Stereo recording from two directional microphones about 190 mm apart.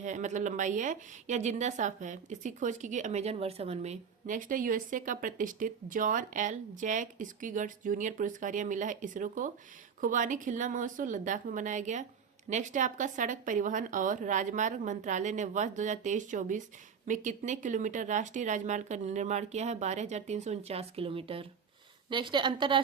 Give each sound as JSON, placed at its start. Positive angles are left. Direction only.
{"t": 0.0, "sound": "a woman's voice", "side_deg": -40}